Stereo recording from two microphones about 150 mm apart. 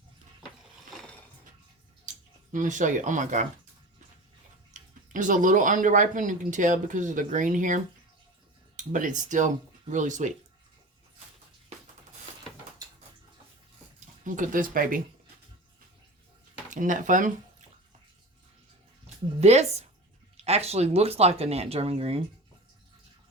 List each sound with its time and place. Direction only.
2.5 s speech: 55° right (ahead or behind)
4.7 s speech: 60° right (ahead or behind)
14.0 s speech: 60° right (ahead or behind)
16.6 s speech: 60° right (ahead or behind)
19.4 s speech: 45° right (ahead or behind)